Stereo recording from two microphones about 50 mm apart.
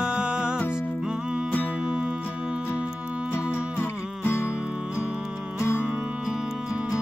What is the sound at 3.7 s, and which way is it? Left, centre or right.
Music, left.